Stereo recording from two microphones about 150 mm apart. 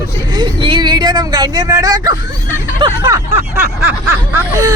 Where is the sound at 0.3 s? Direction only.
30° right (ahead or behind).